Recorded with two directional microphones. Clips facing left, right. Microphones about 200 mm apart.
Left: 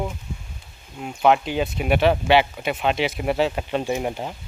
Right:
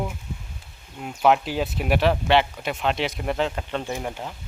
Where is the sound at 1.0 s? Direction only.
Centre (ahead or behind).